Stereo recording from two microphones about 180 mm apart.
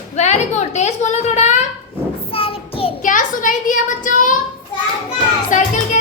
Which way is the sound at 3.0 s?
45° left (ahead or behind).